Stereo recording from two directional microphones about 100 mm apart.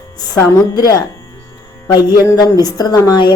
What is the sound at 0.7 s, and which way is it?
Speech, 40° left (ahead or behind).